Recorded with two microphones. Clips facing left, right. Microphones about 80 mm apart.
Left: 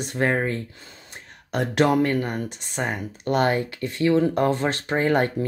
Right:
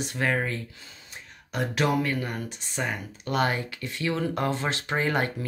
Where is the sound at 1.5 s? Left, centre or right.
Left.